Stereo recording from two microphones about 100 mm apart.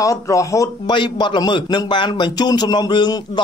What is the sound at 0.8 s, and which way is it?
A man's voice, 50° left (ahead or behind).